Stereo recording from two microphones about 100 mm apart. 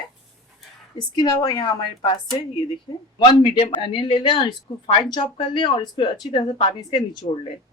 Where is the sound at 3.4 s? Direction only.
55° left (ahead or behind).